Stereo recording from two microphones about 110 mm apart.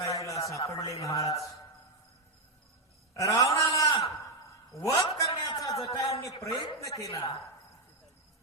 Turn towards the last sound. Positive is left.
turn(degrees=35)  # may be behind; listen again after turning